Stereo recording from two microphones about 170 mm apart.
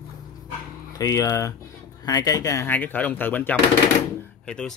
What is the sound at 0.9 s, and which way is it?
Speech, 20° left (ahead or behind).